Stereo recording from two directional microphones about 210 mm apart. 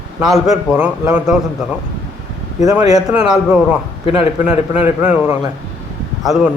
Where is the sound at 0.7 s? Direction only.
5° right (ahead or behind).